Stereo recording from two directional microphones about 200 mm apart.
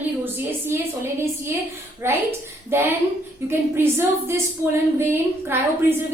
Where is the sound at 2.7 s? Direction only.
10° right (ahead or behind).